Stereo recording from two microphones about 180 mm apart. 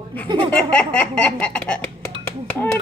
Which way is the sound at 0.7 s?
10° left (ahead or behind).